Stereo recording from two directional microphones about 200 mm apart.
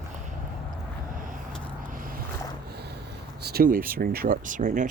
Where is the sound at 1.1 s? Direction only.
40° right (ahead or behind).